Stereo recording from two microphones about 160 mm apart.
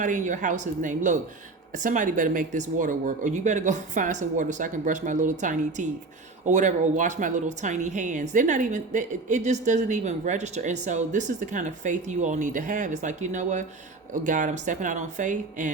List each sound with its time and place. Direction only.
0.0 s a woman's voice: 50° right (ahead or behind)